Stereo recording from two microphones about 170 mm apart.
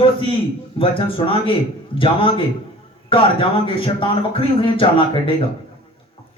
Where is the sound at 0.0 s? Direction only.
30° left (ahead or behind).